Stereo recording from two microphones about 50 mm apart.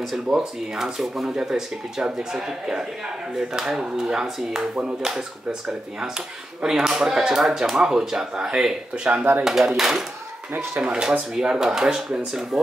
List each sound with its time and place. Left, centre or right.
0.0 s speech: centre
9.1 s speech: right
9.4 s speech: centre
10.8 s speech: centre